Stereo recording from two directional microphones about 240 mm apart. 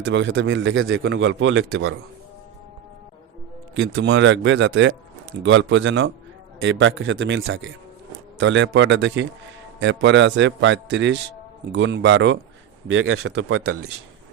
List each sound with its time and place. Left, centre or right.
0.0 s a man's voice: right
3.8 s a man's voice: right